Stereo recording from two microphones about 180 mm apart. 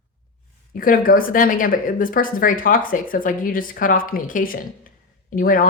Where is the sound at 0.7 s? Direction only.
50° left (ahead or behind).